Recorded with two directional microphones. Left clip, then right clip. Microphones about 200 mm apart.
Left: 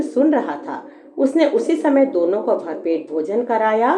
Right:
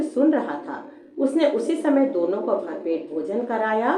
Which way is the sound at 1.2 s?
40° left (ahead or behind).